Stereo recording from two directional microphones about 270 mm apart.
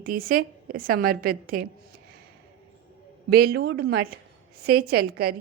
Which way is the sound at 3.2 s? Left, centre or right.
Right.